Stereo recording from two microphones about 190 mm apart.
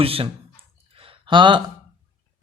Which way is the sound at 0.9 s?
30° right (ahead or behind).